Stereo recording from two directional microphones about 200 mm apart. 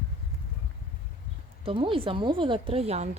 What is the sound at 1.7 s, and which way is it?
Speech, 25° right (ahead or behind).